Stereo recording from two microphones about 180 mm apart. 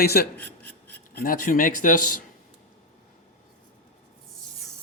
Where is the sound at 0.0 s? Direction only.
60° left (ahead or behind).